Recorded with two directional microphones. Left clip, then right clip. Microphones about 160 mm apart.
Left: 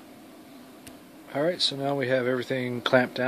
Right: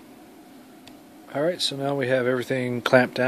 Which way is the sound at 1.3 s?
20° right (ahead or behind).